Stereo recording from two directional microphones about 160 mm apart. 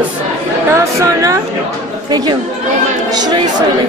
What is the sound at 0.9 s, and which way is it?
Speech, 20° right (ahead or behind).